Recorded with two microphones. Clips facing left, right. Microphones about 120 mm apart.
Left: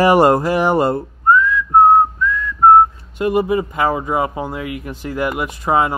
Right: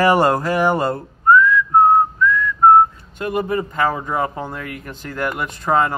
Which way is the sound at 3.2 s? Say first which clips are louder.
Left 5 dB; 10° left (ahead or behind).